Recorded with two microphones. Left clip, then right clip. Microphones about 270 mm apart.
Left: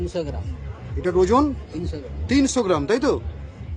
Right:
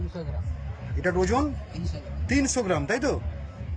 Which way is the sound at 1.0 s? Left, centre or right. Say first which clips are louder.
Left 6 dB; centre.